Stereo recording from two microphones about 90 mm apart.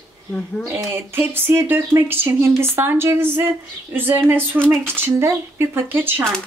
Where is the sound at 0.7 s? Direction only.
25° right (ahead or behind).